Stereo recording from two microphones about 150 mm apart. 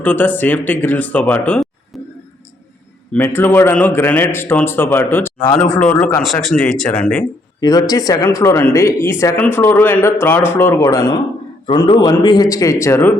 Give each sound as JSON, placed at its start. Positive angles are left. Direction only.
{"t": 0.0, "sound": "speech", "side_deg": 10}
{"t": 3.1, "sound": "speech", "side_deg": 15}
{"t": 6.2, "sound": "speech", "side_deg": 0}
{"t": 7.6, "sound": "speech", "side_deg": 25}